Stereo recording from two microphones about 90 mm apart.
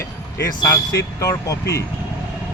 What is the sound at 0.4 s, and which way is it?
Speech, 40° left (ahead or behind).